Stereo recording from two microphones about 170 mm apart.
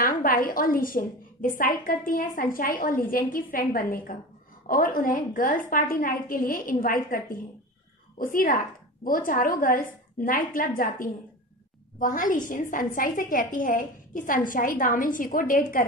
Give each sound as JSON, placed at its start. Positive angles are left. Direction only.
{"t": 0.0, "sound": "a woman's voice", "side_deg": 55}